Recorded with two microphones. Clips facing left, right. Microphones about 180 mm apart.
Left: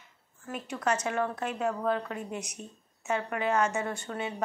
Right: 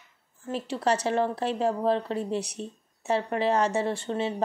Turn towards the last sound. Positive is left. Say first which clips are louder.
# right 6 dB
turn(degrees=-30)  # may be behind; listen again after turning